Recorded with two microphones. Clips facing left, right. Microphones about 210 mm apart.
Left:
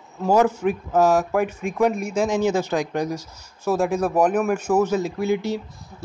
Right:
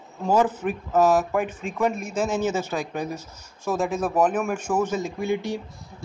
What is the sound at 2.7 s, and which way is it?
Speech, 90° left.